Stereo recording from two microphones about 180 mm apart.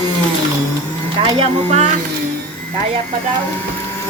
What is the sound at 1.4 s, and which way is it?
Speech, 35° right (ahead or behind).